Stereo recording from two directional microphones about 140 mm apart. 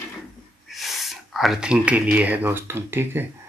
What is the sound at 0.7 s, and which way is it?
Speech, centre (ahead or behind).